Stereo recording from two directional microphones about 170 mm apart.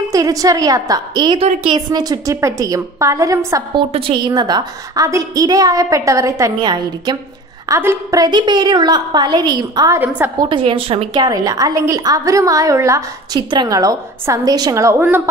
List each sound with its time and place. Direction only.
0.1 s a woman's voice: 20° right (ahead or behind)
3.9 s a woman's voice: 30° right (ahead or behind)
9.9 s a woman's voice: 10° right (ahead or behind)
10.4 s a woman's voice: 30° right (ahead or behind); by 15.2 s 15° right (ahead or behind)